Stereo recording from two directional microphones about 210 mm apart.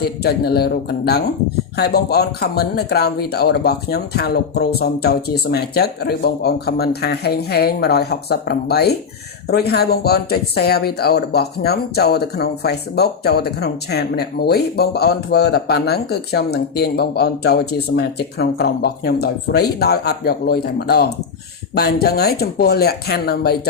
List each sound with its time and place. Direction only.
0.0 s speech: 50° left (ahead or behind)